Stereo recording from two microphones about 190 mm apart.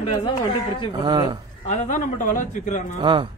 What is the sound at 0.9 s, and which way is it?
Speech, 20° right (ahead or behind).